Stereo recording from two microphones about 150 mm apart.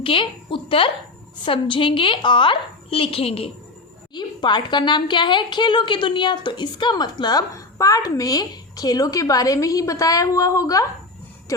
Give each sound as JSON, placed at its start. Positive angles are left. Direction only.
{"t": 0.0, "sound": "a woman's voice", "side_deg": 35}